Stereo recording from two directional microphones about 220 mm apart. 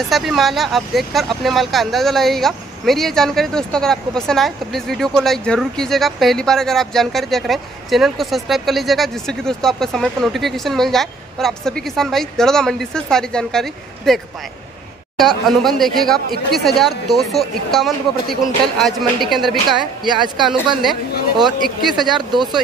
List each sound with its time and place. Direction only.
0.1 s speech: centre (ahead or behind)
19.7 s speech: 20° right (ahead or behind)
21.8 s speech: centre (ahead or behind)